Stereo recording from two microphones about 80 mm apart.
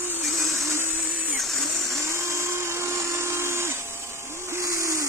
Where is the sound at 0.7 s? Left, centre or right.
Right.